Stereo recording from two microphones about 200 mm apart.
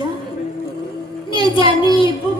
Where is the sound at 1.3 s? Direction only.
25° left (ahead or behind).